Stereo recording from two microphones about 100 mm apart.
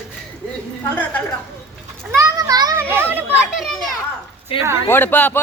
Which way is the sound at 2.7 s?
25° right (ahead or behind).